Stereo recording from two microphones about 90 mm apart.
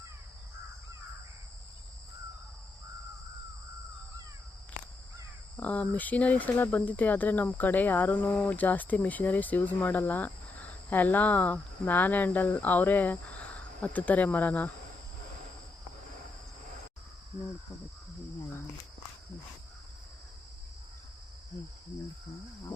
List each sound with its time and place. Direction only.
5.5 s speech: 20° left (ahead or behind)